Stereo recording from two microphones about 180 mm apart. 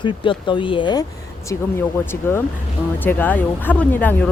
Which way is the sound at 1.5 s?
15° left (ahead or behind).